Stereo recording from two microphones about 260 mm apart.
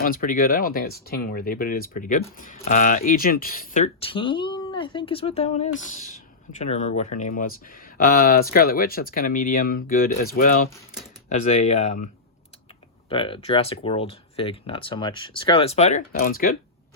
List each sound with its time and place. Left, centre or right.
0.0 s speech: left
13.1 s speech: centre